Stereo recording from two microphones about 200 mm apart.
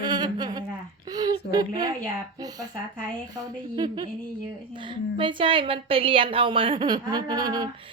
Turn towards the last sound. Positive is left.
turn(degrees=-20)  # may be behind; listen again after turning